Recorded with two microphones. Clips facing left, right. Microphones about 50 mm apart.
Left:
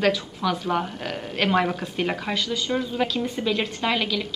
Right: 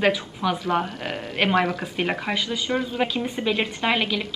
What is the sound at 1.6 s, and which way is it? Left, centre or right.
Speech, right.